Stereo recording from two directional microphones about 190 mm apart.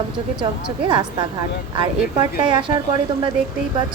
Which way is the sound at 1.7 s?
25° right (ahead or behind).